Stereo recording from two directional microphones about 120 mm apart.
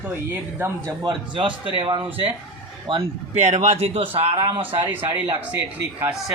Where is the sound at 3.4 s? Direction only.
70° right (ahead or behind).